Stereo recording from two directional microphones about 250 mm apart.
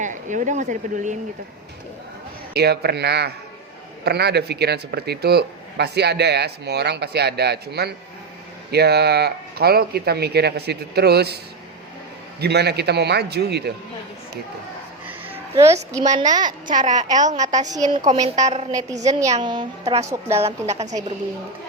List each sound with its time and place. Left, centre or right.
0.0 s speech: right
2.5 s speech: right
12.4 s speech: right
15.3 s a child's voice: centre
16.6 s speech: right
17.7 s a woman's voice: centre
18.0 s speech: right
18.7 s a woman's voice: centre
20.1 s a woman's voice: centre